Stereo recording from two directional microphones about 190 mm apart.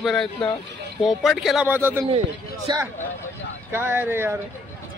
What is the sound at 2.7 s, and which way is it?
Speech, 25° right (ahead or behind).